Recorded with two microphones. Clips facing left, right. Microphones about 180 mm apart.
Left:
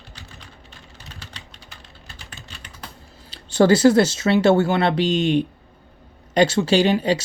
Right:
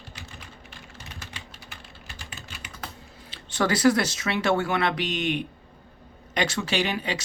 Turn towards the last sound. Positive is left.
turn(degrees=30)  # may be behind; listen again after turning